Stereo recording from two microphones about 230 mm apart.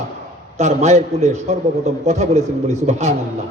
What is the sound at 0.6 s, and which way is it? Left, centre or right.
A man's voice, right.